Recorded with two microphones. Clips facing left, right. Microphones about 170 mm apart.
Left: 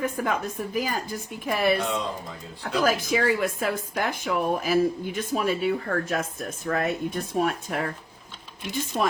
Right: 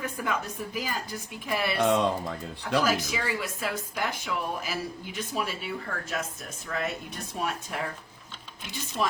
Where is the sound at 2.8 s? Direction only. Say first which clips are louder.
Left 7 dB; 50° left (ahead or behind).